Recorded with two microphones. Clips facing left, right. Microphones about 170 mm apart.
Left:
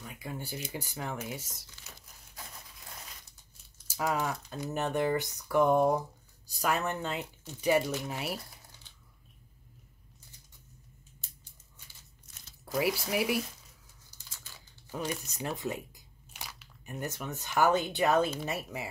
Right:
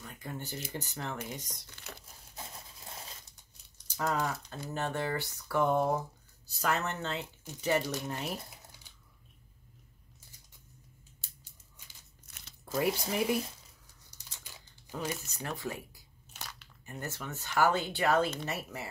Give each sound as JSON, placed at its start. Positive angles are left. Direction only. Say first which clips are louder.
{"t": 0.0, "sound": "speech", "louder": "left 1 dB", "side_deg": 10}
{"t": 1.7, "sound": "crumpling", "louder": "right 6 dB", "side_deg": -60}
{"t": 3.8, "sound": "speech", "louder": "left 1 dB", "side_deg": 10}
{"t": 12.3, "sound": "crumpling", "louder": "right 2 dB", "side_deg": -65}
{"t": 12.6, "sound": "speech", "louder": "left 1 dB", "side_deg": 5}
{"t": 14.5, "sound": "crumpling", "louder": "right 1 dB", "side_deg": -15}
{"t": 14.9, "sound": "speech", "louder": "left 1 dB", "side_deg": 10}
{"t": 15.3, "sound": "a sound", "louder": "left 3 dB", "side_deg": 20}
{"t": 16.8, "sound": "speech", "louder": "left 3 dB", "side_deg": 15}